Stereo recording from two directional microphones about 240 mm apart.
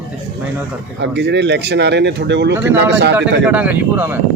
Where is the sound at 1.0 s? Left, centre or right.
Right.